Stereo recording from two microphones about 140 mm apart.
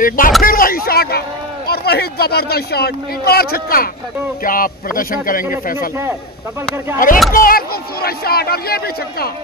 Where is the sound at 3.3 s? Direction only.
90° left.